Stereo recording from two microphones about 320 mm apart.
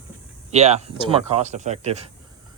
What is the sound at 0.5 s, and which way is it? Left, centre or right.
Speech, centre.